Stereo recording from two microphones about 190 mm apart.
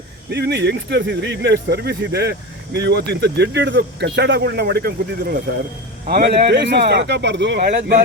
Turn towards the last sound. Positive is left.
turn(degrees=-60)  # may be behind; listen again after turning